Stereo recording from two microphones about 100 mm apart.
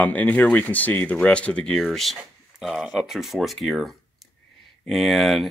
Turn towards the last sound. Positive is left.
turn(degrees=0)  # may be behind; listen again after turning